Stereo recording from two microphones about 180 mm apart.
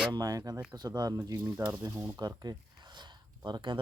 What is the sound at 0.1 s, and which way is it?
Speech, 20° right (ahead or behind).